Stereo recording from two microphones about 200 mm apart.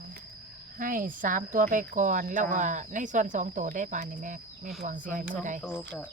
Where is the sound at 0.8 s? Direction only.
45° right (ahead or behind).